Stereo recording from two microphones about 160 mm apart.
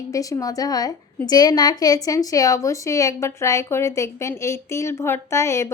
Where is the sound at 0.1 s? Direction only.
20° left (ahead or behind).